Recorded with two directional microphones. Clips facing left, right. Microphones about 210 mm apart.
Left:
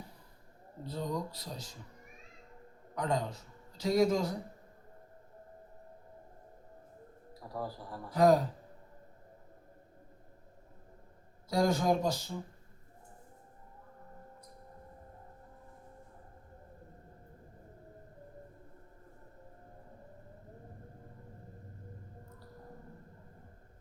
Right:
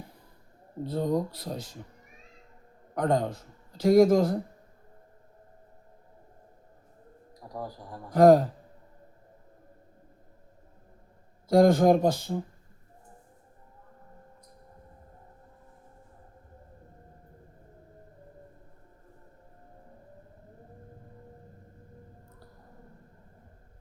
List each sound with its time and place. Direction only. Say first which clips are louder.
0.9 s speech: right 9 dB; 55° right (ahead or behind)
2.9 s a man's voice: right 7 dB; 55° right (ahead or behind)
7.5 s a man's voice: right 1 dB; 15° right (ahead or behind)
8.1 s speech: right 8 dB; 55° right (ahead or behind)
11.4 s speech: right 9 dB; 55° right (ahead or behind)